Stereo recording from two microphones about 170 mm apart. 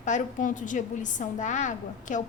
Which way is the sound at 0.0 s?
50° left (ahead or behind).